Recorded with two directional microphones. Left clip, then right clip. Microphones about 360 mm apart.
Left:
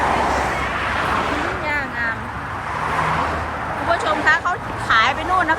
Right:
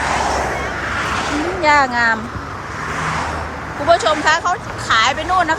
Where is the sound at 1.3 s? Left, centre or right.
Left.